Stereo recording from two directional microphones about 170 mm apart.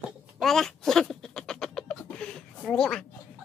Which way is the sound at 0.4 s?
Centre (ahead or behind).